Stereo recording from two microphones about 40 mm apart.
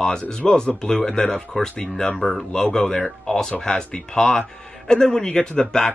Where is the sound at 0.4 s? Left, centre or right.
Centre.